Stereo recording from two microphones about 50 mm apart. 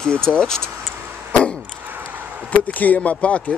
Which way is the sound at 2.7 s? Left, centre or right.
Left.